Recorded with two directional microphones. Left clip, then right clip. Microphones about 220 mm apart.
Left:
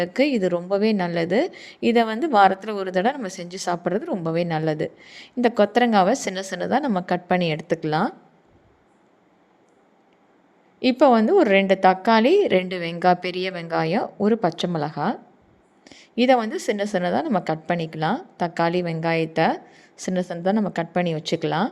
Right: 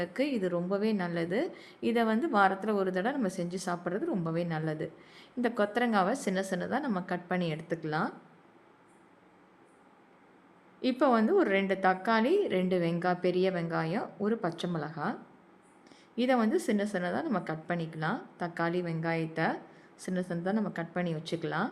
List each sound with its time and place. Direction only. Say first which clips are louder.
0.0 s a woman's voice: left 11 dB; 30° left (ahead or behind)
10.8 s a woman's voice: left 10 dB; 30° left (ahead or behind)